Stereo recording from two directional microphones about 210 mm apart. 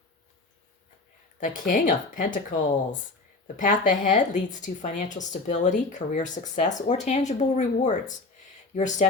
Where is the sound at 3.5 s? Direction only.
40° left (ahead or behind).